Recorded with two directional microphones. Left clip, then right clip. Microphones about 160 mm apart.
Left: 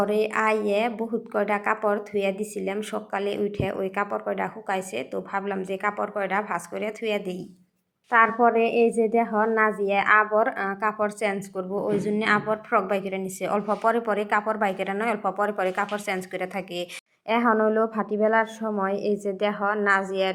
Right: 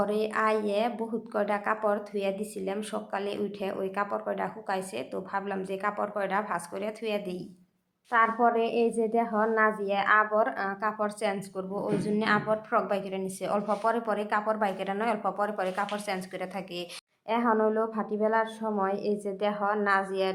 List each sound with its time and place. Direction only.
0.0 s a woman's voice: 20° left (ahead or behind)